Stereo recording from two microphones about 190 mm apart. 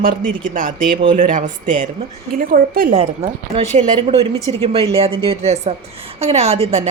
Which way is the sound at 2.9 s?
30° right (ahead or behind).